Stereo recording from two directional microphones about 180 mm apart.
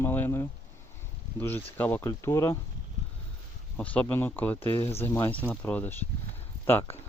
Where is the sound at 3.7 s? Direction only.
5° left (ahead or behind).